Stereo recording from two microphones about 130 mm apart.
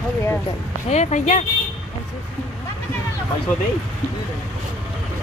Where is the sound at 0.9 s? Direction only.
60° left (ahead or behind).